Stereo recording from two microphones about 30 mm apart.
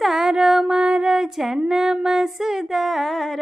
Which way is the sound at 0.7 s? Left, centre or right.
Right.